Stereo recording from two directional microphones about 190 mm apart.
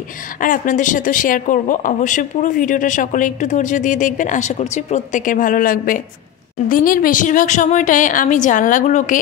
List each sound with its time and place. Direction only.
0.4 s a woman's voice: 45° left (ahead or behind)